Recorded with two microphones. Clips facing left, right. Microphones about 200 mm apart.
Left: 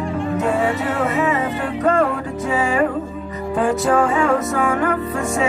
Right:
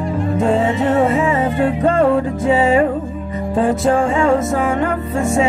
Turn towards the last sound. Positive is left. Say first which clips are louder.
# right 4 dB
turn(degrees=-25)  # may be behind; listen again after turning